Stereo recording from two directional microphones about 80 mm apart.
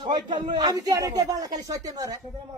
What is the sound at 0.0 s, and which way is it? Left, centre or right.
Speech, right.